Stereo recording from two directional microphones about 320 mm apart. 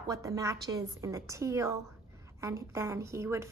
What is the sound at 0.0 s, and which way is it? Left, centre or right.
A woman's voice, centre.